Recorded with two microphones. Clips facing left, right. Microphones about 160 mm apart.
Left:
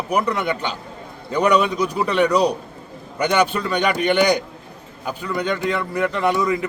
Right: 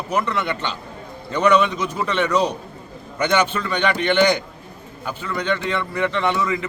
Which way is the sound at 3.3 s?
5° left (ahead or behind).